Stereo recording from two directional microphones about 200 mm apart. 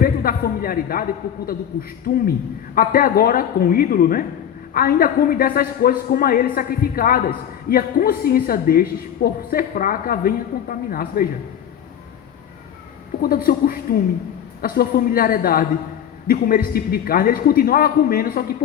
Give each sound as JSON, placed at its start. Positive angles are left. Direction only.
{"t": 0.0, "sound": "a man's voice", "side_deg": 45}
{"t": 2.1, "sound": "a man's voice", "side_deg": 45}
{"t": 13.2, "sound": "a man's voice", "side_deg": 45}